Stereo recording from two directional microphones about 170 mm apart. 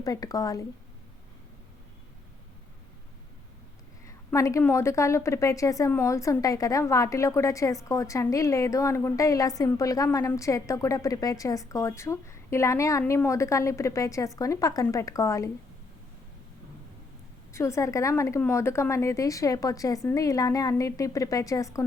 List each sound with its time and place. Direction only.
0.0 s a woman's voice: 20° left (ahead or behind)
4.0 s a woman's voice: 20° left (ahead or behind)
17.5 s a woman's voice: 15° left (ahead or behind)